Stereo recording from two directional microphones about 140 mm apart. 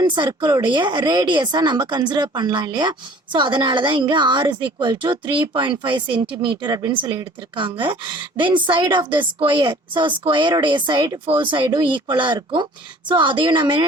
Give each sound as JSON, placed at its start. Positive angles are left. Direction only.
{"t": 0.0, "sound": "a woman's voice", "side_deg": -30}